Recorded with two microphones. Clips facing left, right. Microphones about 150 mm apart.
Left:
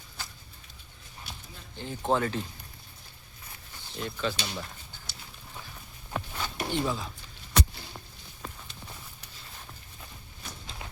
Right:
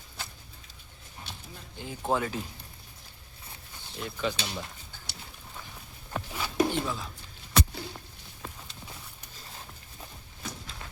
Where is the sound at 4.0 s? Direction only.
10° right (ahead or behind).